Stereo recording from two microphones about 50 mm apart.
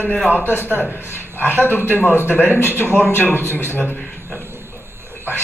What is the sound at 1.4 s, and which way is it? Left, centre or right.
A man's voice, left.